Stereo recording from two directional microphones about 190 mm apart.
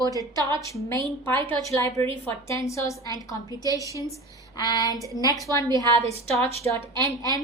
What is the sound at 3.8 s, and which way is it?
Speech, 15° right (ahead or behind).